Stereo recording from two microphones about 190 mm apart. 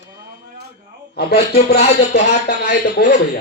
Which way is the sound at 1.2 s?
55° left (ahead or behind).